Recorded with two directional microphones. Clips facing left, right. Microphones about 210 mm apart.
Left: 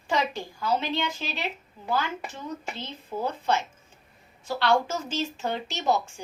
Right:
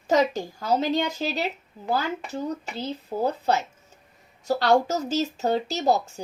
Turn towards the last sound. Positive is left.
turn(degrees=-35)  # may be behind; listen again after turning